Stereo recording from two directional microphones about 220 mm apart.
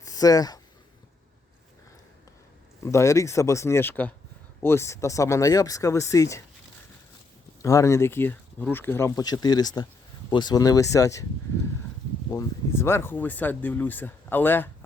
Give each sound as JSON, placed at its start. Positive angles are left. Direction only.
{"t": 0.0, "sound": "a sound", "side_deg": 15}
{"t": 2.8, "sound": "speech", "side_deg": 15}
{"t": 7.6, "sound": "speech", "side_deg": 15}
{"t": 12.3, "sound": "speech", "side_deg": 15}